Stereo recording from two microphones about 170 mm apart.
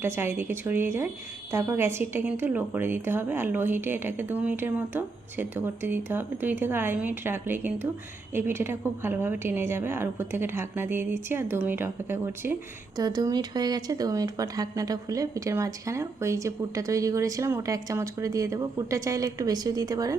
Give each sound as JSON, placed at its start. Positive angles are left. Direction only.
{"t": 0.0, "sound": "speech", "side_deg": -15}